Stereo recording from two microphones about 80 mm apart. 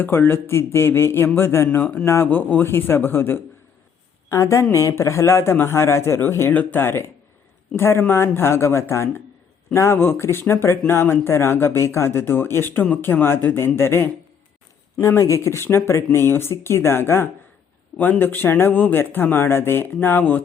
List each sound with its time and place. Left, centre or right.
0.0 s speech: left
6.5 s speech: left
15.0 s speech: left